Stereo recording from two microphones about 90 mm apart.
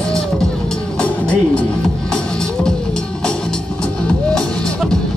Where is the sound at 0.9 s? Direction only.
10° left (ahead or behind).